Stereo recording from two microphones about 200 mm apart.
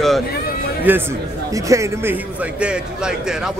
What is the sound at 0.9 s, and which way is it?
Speech, 10° right (ahead or behind).